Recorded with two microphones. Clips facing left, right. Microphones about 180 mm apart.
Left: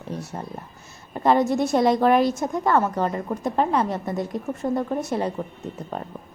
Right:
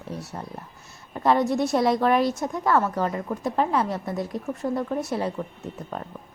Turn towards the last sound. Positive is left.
turn(degrees=0)  # may be behind; listen again after turning